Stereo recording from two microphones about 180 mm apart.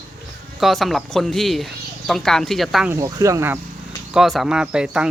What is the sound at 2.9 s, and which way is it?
Speech, 15° right (ahead or behind).